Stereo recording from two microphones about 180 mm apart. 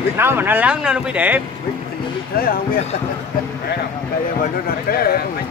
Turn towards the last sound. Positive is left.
turn(degrees=60)  # may be behind; listen again after turning